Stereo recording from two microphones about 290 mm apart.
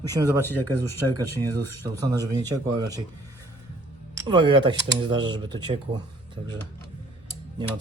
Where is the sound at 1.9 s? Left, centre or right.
Centre.